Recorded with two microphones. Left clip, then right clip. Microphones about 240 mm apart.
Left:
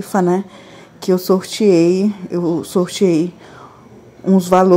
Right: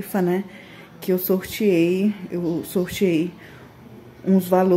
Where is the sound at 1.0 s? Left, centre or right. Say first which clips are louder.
Left 7 dB; centre.